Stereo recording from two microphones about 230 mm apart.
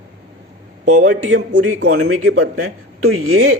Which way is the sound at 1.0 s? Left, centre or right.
Right.